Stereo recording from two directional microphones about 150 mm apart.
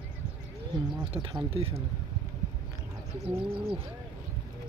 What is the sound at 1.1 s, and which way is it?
Speech, 35° right (ahead or behind).